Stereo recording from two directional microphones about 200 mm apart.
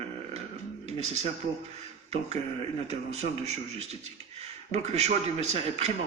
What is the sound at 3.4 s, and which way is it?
Speech, 35° right (ahead or behind).